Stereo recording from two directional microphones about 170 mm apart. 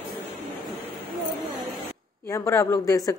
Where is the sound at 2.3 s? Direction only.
15° left (ahead or behind).